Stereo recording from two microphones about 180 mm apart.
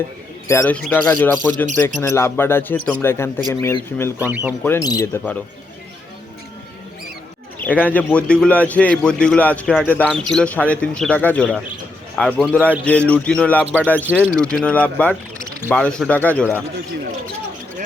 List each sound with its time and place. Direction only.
0.4 s speech: 15° left (ahead or behind)
7.6 s speech: 10° left (ahead or behind)
14.1 s speech: 10° right (ahead or behind)
14.3 s speech: 5° left (ahead or behind)